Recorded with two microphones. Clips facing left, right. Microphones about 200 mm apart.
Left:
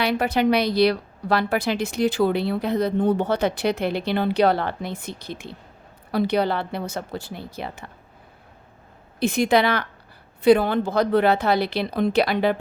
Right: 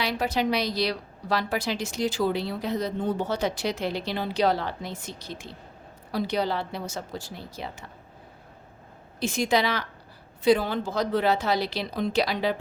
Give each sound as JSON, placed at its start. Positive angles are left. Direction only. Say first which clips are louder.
{"t": 0.0, "sound": "a woman's voice", "louder": "left 5 dB", "side_deg": 60}
{"t": 9.2, "sound": "a woman's voice", "louder": "left 5 dB", "side_deg": 60}